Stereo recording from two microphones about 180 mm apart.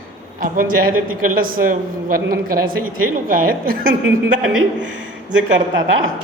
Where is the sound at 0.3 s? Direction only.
50° right (ahead or behind).